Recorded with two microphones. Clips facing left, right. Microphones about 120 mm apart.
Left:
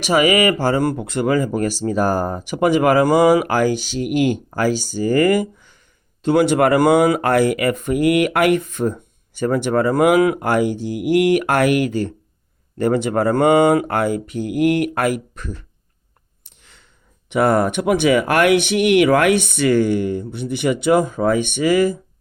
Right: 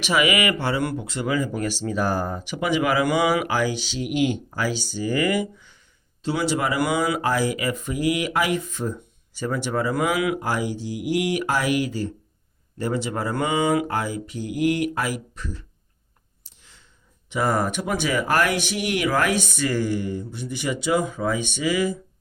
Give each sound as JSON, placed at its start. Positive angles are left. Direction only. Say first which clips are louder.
{"t": 0.0, "sound": "speech", "louder": "left 6 dB", "side_deg": 40}
{"t": 1.0, "sound": "speech", "louder": "left 6 dB", "side_deg": 55}
{"t": 10.4, "sound": "speech", "louder": "left 8 dB", "side_deg": 60}